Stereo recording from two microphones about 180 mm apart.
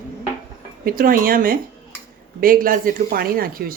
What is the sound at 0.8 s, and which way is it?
Speech, 55° right (ahead or behind).